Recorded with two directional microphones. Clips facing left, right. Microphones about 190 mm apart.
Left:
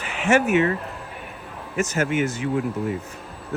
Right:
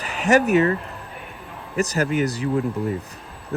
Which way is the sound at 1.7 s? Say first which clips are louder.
Right 1 dB; 35° right (ahead or behind).